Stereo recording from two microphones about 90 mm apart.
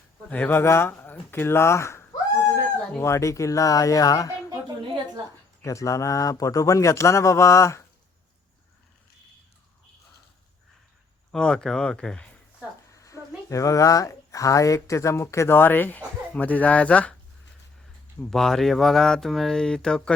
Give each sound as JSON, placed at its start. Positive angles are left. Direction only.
{"t": 0.3, "sound": "speech", "side_deg": 20}
{"t": 5.6, "sound": "speech", "side_deg": 35}
{"t": 11.3, "sound": "speech", "side_deg": 10}
{"t": 12.9, "sound": "speech", "side_deg": 35}
{"t": 18.3, "sound": "speech", "side_deg": 5}